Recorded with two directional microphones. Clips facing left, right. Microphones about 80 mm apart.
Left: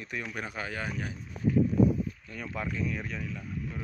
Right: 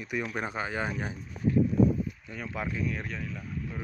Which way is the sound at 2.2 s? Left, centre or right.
Centre.